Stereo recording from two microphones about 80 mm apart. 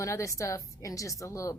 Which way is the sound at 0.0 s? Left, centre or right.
Left.